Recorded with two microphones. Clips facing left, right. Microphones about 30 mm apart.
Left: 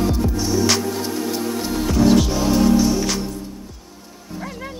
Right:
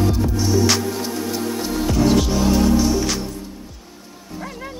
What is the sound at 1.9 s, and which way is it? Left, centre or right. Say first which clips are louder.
Music: left 2 dB; centre.